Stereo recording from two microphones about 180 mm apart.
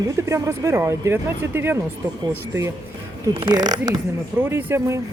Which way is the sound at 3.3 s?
30° right (ahead or behind).